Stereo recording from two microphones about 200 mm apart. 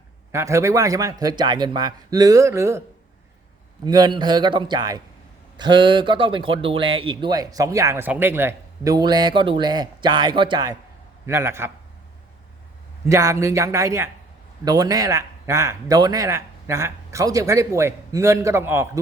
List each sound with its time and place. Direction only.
0.3 s a man's voice: 15° right (ahead or behind)
3.8 s a man's voice: 20° right (ahead or behind)
13.1 s a man's voice: 15° right (ahead or behind)